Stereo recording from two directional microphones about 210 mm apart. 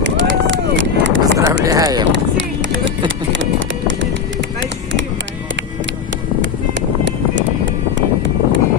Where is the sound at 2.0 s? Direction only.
60° right (ahead or behind).